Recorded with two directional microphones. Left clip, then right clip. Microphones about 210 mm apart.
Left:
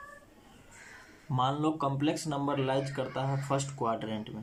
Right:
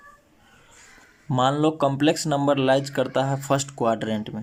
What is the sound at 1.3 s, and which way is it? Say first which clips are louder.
Speech: right 9 dB; 45° right (ahead or behind).